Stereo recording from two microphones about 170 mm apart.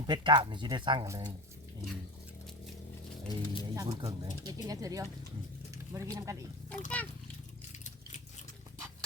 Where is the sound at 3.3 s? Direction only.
20° right (ahead or behind).